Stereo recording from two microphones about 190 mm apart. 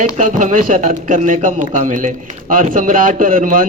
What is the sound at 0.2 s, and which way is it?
A man's voice, 45° right (ahead or behind).